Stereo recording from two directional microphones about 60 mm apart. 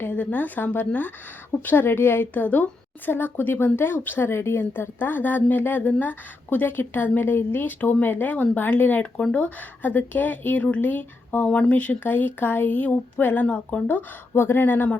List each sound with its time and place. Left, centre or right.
0.0 s a woman's voice: left
11.4 s speech: centre
14.3 s a woman's voice: left